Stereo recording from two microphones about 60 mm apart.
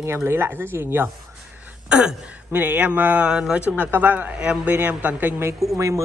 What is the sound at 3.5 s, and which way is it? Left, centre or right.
Speech, right.